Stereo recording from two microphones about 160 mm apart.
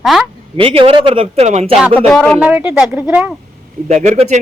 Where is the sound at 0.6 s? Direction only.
35° right (ahead or behind).